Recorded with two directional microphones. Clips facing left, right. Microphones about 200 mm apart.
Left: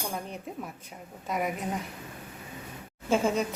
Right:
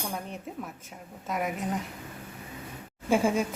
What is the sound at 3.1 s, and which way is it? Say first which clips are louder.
Speech: right 1 dB; 10° right (ahead or behind).